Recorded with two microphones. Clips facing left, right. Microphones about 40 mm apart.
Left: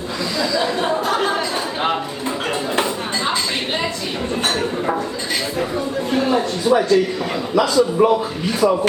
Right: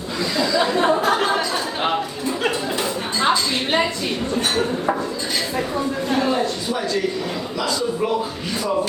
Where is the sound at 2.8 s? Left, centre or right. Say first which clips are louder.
Left 1 dB; left.